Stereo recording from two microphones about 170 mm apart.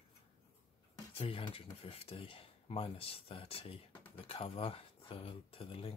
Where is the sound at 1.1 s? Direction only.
30° left (ahead or behind).